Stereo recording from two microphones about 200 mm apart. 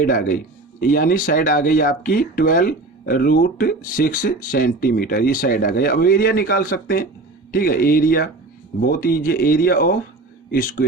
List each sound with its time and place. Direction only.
0.0 s speech: 45° left (ahead or behind)